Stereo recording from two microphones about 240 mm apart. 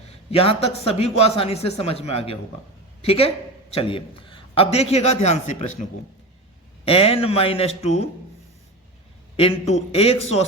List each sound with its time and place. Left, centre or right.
0.3 s speech: left
6.8 s speech: left
9.3 s speech: left